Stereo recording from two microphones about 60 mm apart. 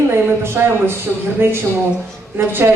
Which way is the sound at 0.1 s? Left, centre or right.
Right.